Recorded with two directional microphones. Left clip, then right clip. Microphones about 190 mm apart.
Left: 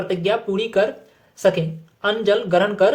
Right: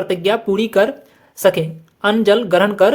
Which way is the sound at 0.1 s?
35° right (ahead or behind).